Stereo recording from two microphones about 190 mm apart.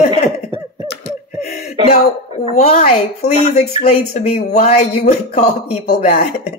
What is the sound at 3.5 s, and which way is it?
Speech, 35° left (ahead or behind).